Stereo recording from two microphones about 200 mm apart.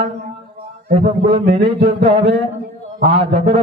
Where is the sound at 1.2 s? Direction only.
30° right (ahead or behind).